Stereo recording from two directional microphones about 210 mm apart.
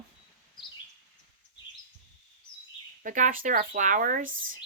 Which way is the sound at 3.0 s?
40° right (ahead or behind).